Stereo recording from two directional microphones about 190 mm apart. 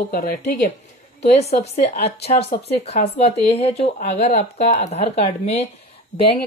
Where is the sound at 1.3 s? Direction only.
35° left (ahead or behind).